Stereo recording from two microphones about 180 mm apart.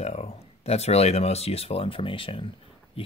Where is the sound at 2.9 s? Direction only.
30° left (ahead or behind).